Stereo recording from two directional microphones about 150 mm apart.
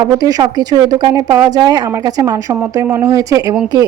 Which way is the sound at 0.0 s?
25° right (ahead or behind).